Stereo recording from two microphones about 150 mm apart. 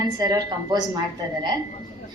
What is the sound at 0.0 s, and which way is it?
A woman's voice, 25° right (ahead or behind).